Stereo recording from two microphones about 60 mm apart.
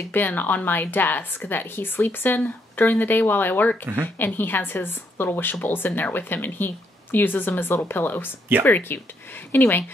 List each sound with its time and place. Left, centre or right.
0.1 s a woman's voice: left